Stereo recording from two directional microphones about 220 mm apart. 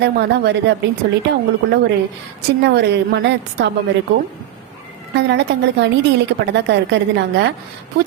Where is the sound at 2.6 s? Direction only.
50° right (ahead or behind).